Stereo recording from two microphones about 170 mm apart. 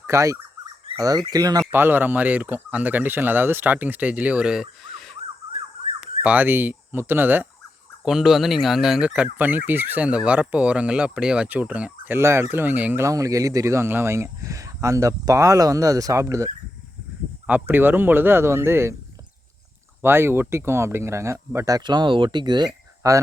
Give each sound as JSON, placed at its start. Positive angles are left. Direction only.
{"t": 0.1, "sound": "speech", "side_deg": -20}
{"t": 0.9, "sound": "bird", "side_deg": -25}
{"t": 1.2, "sound": "car alarm", "side_deg": -25}
{"t": 4.8, "sound": "a sound", "side_deg": 0}
{"t": 6.2, "sound": "car alarm", "side_deg": -10}
{"t": 20.0, "sound": "car alarm", "side_deg": -15}